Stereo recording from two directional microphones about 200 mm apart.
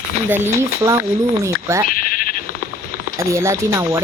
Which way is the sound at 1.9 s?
45° left (ahead or behind).